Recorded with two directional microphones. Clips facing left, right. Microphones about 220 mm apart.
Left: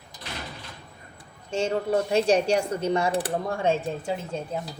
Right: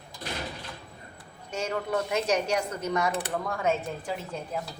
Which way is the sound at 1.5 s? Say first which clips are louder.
Left 5 dB; 30° left (ahead or behind).